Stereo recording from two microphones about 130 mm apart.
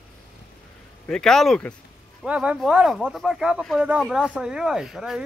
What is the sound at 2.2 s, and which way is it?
Speech, 10° right (ahead or behind).